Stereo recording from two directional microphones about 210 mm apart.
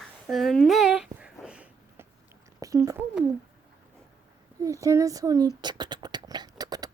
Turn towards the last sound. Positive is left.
turn(degrees=-20)  # may be behind; listen again after turning